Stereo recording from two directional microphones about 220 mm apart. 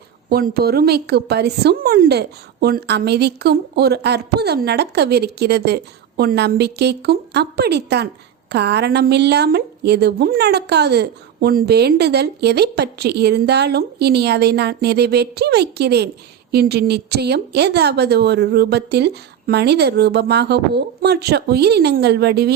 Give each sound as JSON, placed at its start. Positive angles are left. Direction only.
{"t": 0.3, "sound": "a woman's voice", "side_deg": -45}